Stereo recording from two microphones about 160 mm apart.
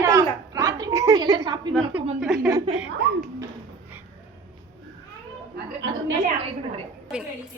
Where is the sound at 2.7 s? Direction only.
35° right (ahead or behind).